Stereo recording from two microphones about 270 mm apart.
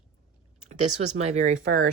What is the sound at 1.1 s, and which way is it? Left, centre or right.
Speech, right.